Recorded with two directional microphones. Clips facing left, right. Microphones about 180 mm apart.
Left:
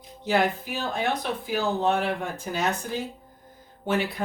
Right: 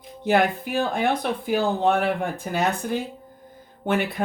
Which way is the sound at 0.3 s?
60° right (ahead or behind).